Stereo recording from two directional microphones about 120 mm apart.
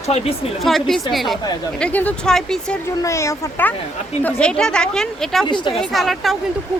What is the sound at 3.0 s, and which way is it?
Speech, 25° left (ahead or behind).